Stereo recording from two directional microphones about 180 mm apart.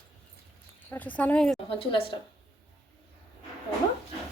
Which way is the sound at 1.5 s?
30° left (ahead or behind).